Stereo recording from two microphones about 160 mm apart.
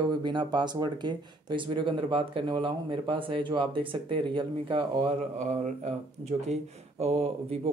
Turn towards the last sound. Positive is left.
turn(degrees=-40)  # may be behind; listen again after turning